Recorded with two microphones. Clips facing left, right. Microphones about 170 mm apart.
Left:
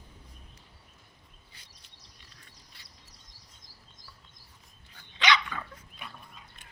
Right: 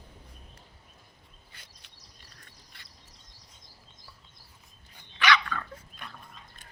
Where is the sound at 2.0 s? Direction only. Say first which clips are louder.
Right 1 dB; 45° right (ahead or behind).